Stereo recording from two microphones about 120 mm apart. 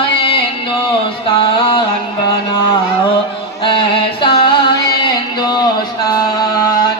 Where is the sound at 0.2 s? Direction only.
45° left (ahead or behind).